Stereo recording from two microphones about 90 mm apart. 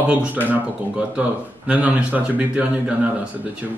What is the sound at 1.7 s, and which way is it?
A man's voice, 15° right (ahead or behind).